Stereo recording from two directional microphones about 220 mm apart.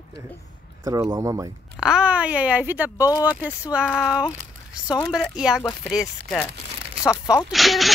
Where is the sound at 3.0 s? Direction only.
15° left (ahead or behind).